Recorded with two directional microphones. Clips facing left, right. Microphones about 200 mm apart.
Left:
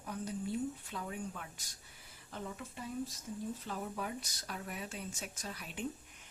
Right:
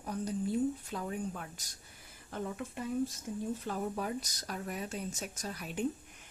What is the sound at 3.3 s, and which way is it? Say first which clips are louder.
Speech: right 4 dB; 55° right (ahead or behind).